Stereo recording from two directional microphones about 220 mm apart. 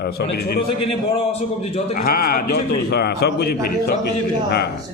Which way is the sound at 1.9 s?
45° left (ahead or behind).